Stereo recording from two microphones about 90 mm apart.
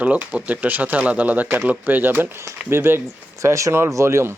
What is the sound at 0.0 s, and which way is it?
Speech, 15° right (ahead or behind).